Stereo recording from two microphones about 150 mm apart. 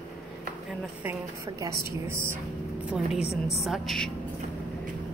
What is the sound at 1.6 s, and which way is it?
Speech, 15° right (ahead or behind).